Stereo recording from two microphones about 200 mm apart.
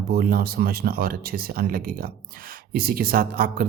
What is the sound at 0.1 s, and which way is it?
Speech, 50° right (ahead or behind).